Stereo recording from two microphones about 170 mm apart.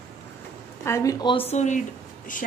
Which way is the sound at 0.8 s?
15° left (ahead or behind).